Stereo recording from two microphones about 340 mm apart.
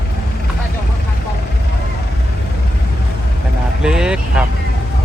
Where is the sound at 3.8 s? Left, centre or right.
Centre.